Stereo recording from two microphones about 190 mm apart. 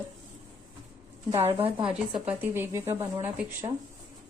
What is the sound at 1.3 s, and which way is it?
Speech, 30° right (ahead or behind).